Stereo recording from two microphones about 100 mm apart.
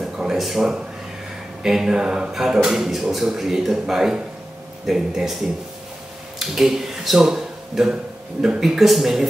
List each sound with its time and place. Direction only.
0.0 s a sound: 5° right (ahead or behind)
1.6 s speech: 5° right (ahead or behind)
6.4 s speech: 5° right (ahead or behind)